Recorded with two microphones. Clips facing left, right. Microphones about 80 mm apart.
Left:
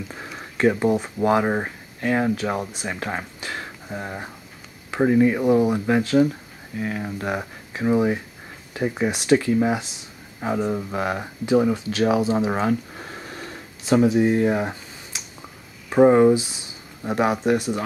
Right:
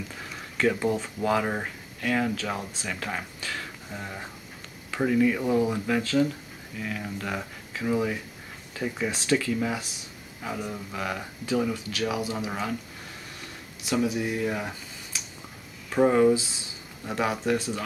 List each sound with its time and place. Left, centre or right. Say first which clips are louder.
0.4 s speech: left 5 dB; left
9.1 s speech: left 7 dB; centre
9.4 s speech: left 7 dB; left